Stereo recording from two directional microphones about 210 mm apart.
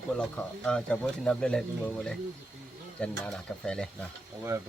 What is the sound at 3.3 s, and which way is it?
Speech, 5° left (ahead or behind).